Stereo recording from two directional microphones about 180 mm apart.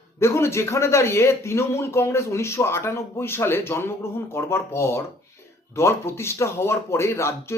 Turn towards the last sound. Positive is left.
turn(degrees=15)  # may be behind; listen again after turning